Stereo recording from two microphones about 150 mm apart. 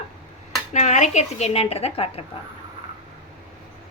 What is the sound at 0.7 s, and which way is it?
Speech, 50° left (ahead or behind).